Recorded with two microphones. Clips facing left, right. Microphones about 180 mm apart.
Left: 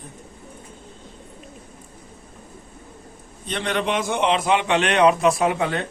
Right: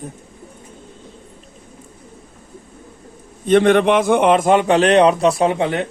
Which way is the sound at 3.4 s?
50° right (ahead or behind).